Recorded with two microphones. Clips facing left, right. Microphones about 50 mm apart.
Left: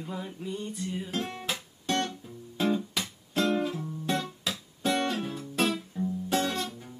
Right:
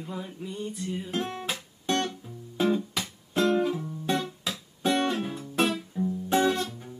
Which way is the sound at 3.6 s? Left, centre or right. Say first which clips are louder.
Right 4 dB; centre.